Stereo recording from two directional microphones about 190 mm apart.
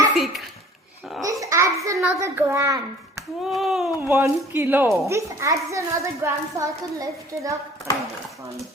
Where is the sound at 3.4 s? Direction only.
Centre (ahead or behind).